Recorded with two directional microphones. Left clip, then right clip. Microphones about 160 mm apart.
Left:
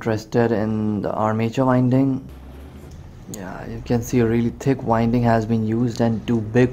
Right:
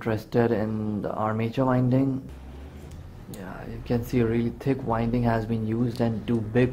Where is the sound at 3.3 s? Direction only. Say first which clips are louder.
Left 6 dB; 20° left (ahead or behind).